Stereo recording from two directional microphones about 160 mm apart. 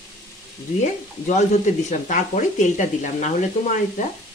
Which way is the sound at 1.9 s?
55° left (ahead or behind).